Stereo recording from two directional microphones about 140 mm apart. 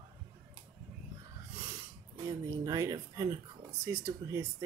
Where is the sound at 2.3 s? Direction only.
25° right (ahead or behind).